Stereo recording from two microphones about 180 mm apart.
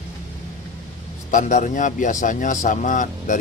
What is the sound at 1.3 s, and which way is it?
A man's voice, 45° left (ahead or behind).